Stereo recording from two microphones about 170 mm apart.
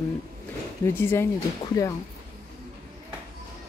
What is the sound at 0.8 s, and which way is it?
Speech, 15° left (ahead or behind).